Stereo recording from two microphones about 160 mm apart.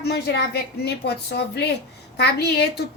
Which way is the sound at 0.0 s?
85° left.